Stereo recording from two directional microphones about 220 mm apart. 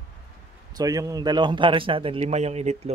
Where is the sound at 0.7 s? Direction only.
15° right (ahead or behind).